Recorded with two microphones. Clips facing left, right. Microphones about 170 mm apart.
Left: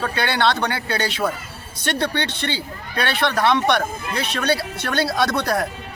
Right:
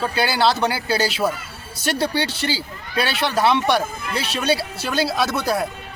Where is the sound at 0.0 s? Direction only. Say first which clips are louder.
Right 1 dB; 5° right (ahead or behind).